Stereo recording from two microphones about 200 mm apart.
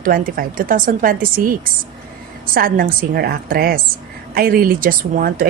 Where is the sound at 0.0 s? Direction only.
45° right (ahead or behind).